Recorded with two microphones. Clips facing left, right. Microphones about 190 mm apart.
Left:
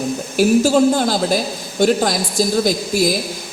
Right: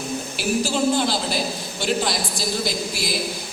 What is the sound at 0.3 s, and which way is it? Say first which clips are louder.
A woman's voice: left 10 dB; 45° left (ahead or behind).